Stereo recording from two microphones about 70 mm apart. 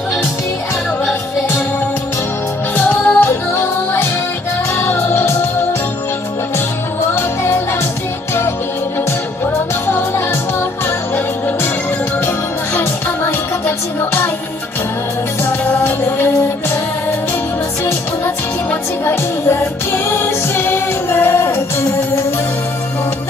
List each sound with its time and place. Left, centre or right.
2.7 s music: left
7.1 s music: left
9.8 s music: left
12.7 s music: left
19.0 s music: left